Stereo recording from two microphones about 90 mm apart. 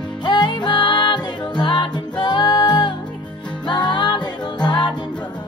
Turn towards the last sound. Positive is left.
turn(degrees=55)  # may be behind; listen again after turning